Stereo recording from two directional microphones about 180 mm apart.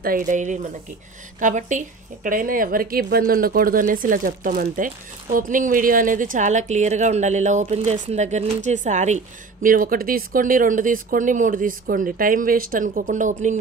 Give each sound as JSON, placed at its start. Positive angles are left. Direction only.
{"t": 0.0, "sound": "speech", "side_deg": -50}